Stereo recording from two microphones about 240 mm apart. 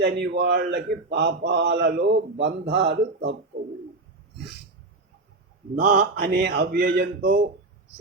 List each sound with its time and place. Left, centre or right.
0.0 s a man's voice: right
2.0 s speech: right
2.4 s a man's voice: right
5.7 s speech: right